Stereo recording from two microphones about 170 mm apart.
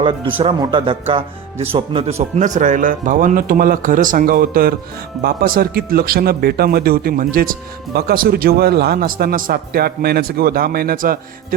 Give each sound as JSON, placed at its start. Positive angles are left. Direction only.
{"t": 0.0, "sound": "a man's voice", "side_deg": -30}